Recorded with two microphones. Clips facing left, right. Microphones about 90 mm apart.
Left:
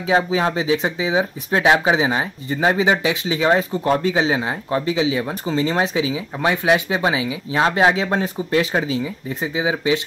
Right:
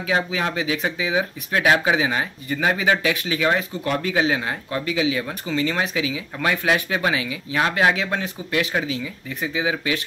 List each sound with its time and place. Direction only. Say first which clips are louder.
0.0 s speech: left 5 dB; 25° left (ahead or behind)